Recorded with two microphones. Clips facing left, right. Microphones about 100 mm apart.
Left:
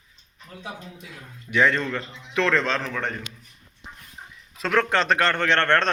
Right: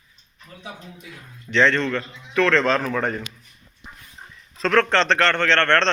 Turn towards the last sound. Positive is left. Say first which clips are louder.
# right 2 dB
turn(degrees=15)  # may be behind; listen again after turning